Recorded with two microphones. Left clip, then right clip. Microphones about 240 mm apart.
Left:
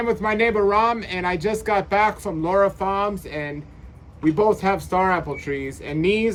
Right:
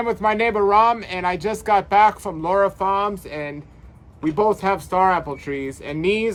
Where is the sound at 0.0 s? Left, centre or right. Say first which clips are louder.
Right 1 dB; centre.